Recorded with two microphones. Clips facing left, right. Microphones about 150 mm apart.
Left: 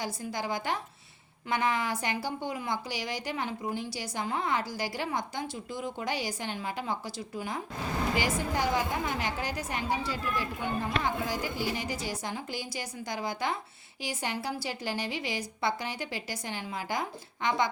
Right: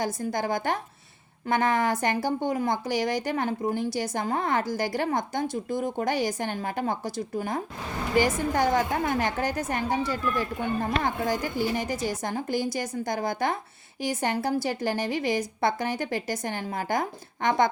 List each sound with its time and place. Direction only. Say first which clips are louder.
0.0 s speech: right 6 dB; 50° right (ahead or behind)